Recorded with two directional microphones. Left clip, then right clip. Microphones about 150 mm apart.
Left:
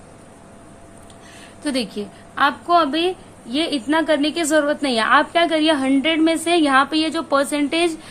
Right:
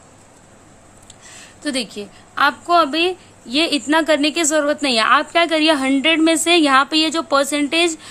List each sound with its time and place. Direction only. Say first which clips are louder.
1.4 s a woman's voice: even; 25° right (ahead or behind)